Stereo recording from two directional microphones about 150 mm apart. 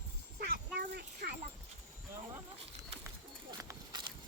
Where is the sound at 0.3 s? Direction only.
85° right.